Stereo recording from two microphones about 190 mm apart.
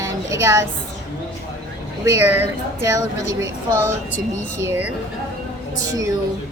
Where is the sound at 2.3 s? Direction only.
15° right (ahead or behind).